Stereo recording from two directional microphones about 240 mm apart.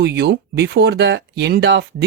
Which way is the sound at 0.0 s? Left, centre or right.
Right.